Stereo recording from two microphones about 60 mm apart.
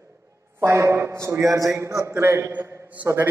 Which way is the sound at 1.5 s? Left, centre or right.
Right.